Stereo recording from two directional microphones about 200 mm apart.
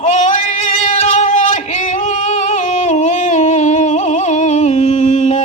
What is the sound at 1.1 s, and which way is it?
Singing, 35° left (ahead or behind).